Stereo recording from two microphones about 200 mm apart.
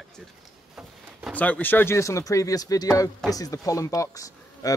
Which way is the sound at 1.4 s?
10° left (ahead or behind).